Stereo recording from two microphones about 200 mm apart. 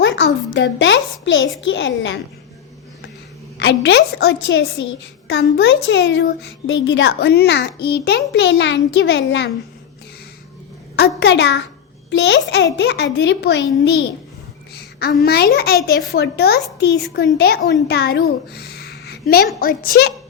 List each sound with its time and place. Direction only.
0.0 s a sound: 65° left (ahead or behind)
1.6 s a woman's voice: 65° left (ahead or behind)
3.6 s a woman's voice: 55° left (ahead or behind)
10.9 s a woman's voice: 55° left (ahead or behind)
14.8 s a sound: 50° left (ahead or behind)
15.2 s a child's voice: 50° left (ahead or behind)